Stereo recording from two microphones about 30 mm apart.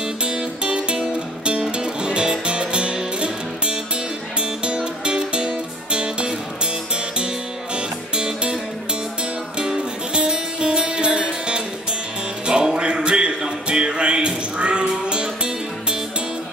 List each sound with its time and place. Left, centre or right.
0.0 s music: right
7.7 s music: right
10.1 s music: right